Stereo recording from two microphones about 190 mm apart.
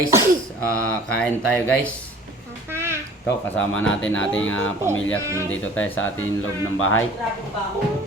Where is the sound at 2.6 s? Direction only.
15° right (ahead or behind).